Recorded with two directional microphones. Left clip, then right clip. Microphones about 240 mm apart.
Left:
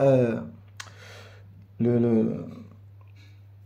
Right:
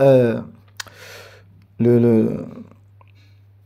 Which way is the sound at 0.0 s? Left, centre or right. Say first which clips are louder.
Right 7 dB; right.